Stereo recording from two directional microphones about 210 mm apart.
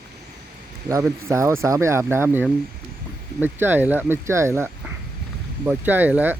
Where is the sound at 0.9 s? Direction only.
15° right (ahead or behind).